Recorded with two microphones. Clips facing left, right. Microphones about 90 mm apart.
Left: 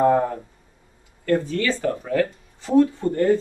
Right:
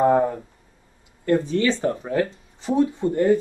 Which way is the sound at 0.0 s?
20° right (ahead or behind).